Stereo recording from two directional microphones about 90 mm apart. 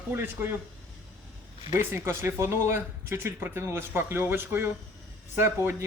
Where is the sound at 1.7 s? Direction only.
30° right (ahead or behind).